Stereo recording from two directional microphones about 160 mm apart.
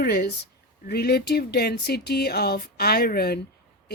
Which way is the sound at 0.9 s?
85° left.